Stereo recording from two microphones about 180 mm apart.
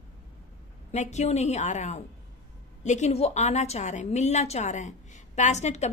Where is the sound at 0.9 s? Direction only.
40° left (ahead or behind).